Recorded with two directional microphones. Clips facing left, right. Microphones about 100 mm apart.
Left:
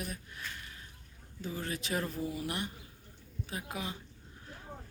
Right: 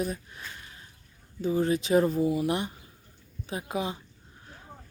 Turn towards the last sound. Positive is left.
turn(degrees=-20)  # may be behind; listen again after turning